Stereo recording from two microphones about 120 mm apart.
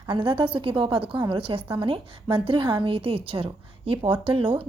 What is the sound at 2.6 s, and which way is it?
Speech, 35° right (ahead or behind).